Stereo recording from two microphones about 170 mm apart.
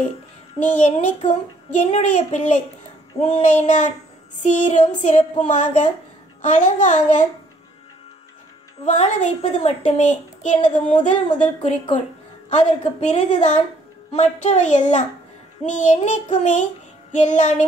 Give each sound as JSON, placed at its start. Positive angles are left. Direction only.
{"t": 0.6, "sound": "a child's voice", "side_deg": 45}
{"t": 8.8, "sound": "a child's voice", "side_deg": 45}